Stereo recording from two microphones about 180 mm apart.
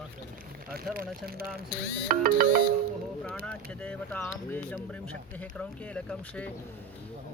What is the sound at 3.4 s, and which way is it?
Speech, 5° left (ahead or behind).